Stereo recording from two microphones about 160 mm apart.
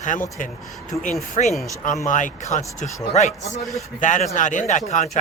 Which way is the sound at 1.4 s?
40° left (ahead or behind).